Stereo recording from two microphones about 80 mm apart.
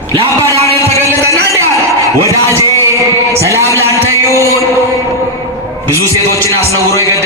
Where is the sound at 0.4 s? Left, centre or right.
Left.